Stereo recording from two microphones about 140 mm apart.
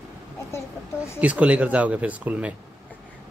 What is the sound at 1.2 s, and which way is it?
Speech, 10° right (ahead or behind).